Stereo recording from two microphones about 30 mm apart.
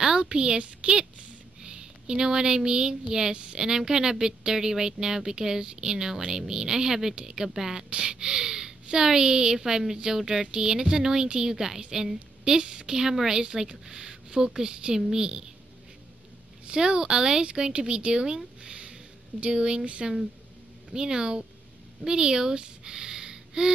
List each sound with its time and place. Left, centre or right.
0.2 s speech: right
7.9 s speech: right
12.6 s speech: right
13.4 s speech: right
16.6 s speech: right
18.6 s a sound: right
19.4 s speech: right
19.8 s speech: right
20.9 s speech: right